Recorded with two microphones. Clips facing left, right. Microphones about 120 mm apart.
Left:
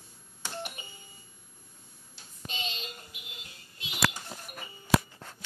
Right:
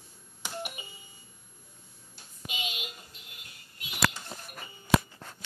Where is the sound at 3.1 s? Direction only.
20° left (ahead or behind).